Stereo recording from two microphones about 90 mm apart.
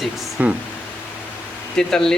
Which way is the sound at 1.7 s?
5° left (ahead or behind).